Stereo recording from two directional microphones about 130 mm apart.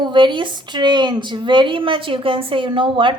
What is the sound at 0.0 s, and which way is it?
A woman's voice, 35° right (ahead or behind).